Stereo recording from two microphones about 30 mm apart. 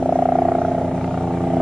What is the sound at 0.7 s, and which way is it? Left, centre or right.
Vehicle, centre.